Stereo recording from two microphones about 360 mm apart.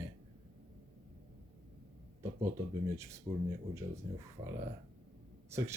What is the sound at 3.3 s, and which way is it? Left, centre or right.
Speech, centre.